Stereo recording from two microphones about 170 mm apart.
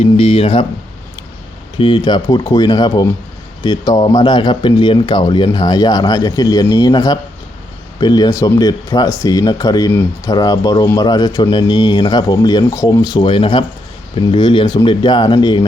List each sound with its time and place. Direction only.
0.0 s speech: 35° left (ahead or behind)
1.8 s speech: 25° left (ahead or behind)